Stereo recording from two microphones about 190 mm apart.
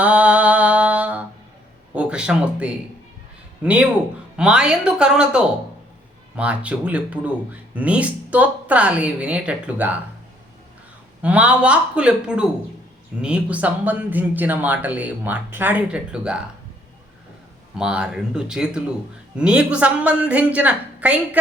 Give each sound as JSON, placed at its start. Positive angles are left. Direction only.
{"t": 0.0, "sound": "a sound", "side_deg": -5}
{"t": 2.0, "sound": "a woman's voice", "side_deg": -5}
{"t": 11.2, "sound": "speech", "side_deg": -5}
{"t": 17.7, "sound": "a woman's voice", "side_deg": -5}